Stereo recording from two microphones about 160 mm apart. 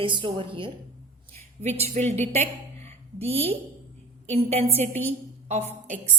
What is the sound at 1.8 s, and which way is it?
A woman's voice, 45° right (ahead or behind).